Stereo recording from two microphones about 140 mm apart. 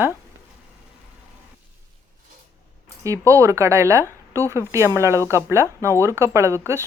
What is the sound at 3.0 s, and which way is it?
A woman's voice, 20° right (ahead or behind).